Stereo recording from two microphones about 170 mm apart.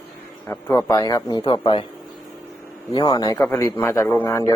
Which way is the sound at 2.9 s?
25° left (ahead or behind).